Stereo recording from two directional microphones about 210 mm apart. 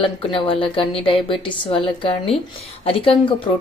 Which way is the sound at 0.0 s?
25° left (ahead or behind).